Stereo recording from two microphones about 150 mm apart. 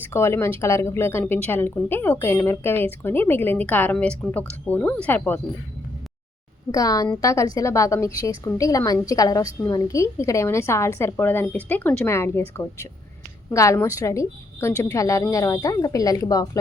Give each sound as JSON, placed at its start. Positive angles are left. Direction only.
{"t": 0.1, "sound": "a woman's voice", "side_deg": 15}
{"t": 6.7, "sound": "a woman's voice", "side_deg": 25}
{"t": 13.5, "sound": "a woman's voice", "side_deg": 20}